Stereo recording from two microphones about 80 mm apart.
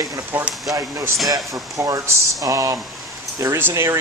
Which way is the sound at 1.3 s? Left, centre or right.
Right.